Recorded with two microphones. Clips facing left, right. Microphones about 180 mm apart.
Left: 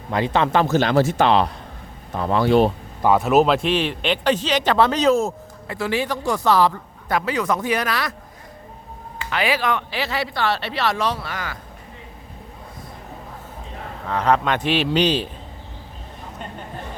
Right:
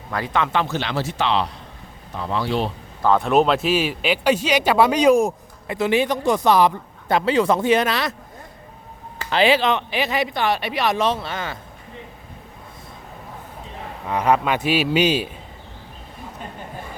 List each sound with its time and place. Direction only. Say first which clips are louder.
0.1 s speech: left 3 dB; 25° left (ahead or behind)
0.4 s speech: left 5 dB; 40° left (ahead or behind)
3.0 s a man's voice: left 1 dB; 10° left (ahead or behind); by 8.1 s 25° right (ahead or behind)
9.1 s speech: right 5 dB; 30° right (ahead or behind)
14.1 s a man's voice: even; 10° right (ahead or behind)